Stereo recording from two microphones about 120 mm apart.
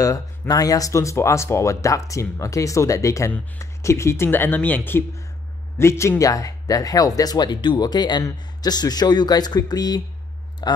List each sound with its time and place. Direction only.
0.0 s speech: 30° left (ahead or behind)